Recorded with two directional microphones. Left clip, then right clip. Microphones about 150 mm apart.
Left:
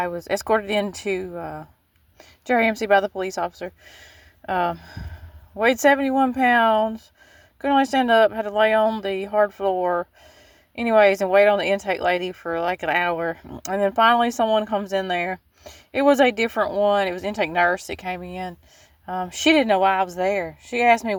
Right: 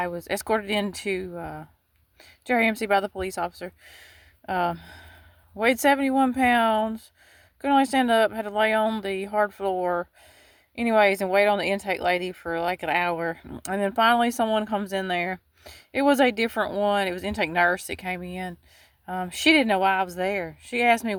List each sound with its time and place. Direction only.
0.0 s speech: 15° right (ahead or behind)
1.2 s speech: 25° right (ahead or behind)